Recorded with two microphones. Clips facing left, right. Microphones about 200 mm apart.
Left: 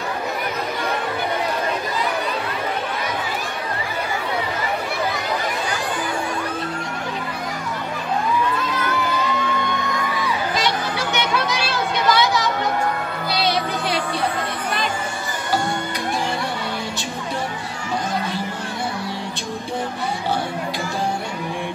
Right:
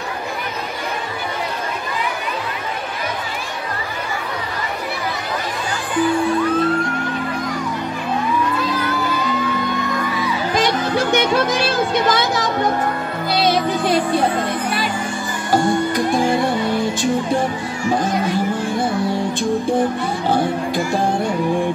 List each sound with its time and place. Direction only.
10.5 s music: 50° right (ahead or behind)